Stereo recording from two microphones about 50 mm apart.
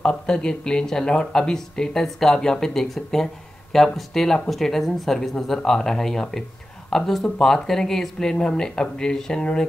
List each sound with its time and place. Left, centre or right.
0.0 s speech: centre